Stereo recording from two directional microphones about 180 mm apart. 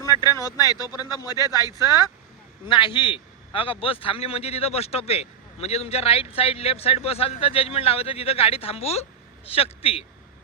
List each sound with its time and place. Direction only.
0.3 s a man's voice: 20° left (ahead or behind)